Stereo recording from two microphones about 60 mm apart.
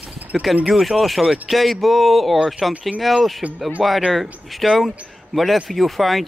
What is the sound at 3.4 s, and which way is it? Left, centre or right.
Speech, right.